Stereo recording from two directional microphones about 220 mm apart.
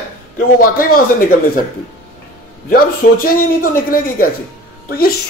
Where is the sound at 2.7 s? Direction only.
40° left (ahead or behind).